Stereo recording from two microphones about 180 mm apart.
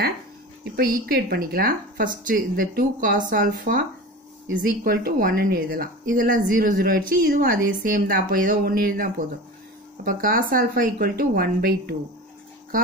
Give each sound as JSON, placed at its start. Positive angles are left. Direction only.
{"t": 0.7, "sound": "speech", "side_deg": -60}